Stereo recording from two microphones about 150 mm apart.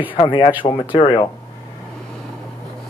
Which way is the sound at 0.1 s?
35° left (ahead or behind).